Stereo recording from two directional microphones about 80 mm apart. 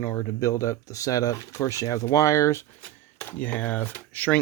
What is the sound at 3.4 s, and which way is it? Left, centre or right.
Speech, centre.